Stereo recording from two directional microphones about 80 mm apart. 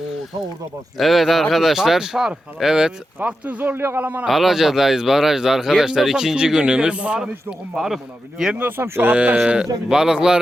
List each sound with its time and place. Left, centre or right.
0.9 s speech: centre
3.2 s speech: right
4.3 s speech: centre
8.5 s speech: right; by 10.4 s centre